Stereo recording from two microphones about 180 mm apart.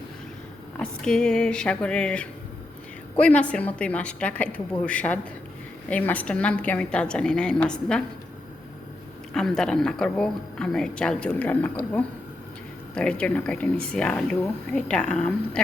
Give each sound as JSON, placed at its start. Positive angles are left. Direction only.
{"t": 0.8, "sound": "a woman's voice", "side_deg": 5}
{"t": 9.3, "sound": "a woman's voice", "side_deg": 5}